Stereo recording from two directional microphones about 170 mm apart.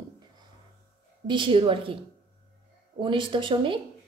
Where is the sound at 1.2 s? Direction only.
30° right (ahead or behind).